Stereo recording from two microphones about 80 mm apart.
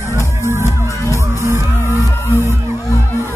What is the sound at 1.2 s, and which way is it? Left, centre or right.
Music, right.